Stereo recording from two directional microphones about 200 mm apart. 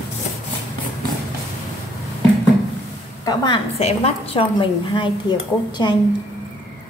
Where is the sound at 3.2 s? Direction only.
20° left (ahead or behind).